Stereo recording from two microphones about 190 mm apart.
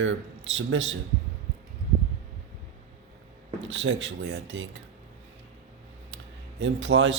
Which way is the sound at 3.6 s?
75° right (ahead or behind).